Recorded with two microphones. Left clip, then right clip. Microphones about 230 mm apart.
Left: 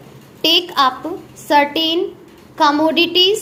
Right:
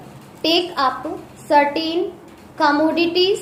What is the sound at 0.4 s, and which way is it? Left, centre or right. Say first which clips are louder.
A woman's voice: left 4 dB; left.